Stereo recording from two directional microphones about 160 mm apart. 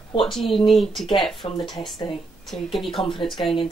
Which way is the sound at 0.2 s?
Centre (ahead or behind).